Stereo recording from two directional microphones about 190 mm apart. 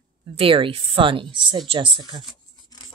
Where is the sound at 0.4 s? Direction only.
30° right (ahead or behind).